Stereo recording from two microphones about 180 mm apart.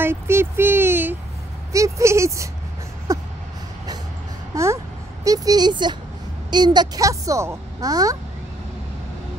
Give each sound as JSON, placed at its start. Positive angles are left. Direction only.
{"t": 0.0, "sound": "a sound", "side_deg": -15}
{"t": 1.7, "sound": "speech", "side_deg": -15}
{"t": 3.1, "sound": "vehicle", "side_deg": -15}
{"t": 4.5, "sound": "speech", "side_deg": -20}